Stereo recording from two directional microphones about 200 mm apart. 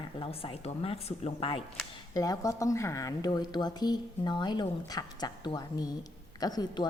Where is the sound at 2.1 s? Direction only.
15° left (ahead or behind).